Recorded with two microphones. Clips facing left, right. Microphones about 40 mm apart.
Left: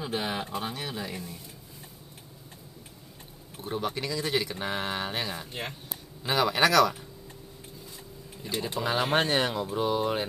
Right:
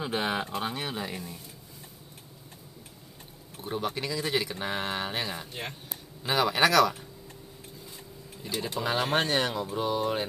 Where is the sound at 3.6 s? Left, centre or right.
Centre.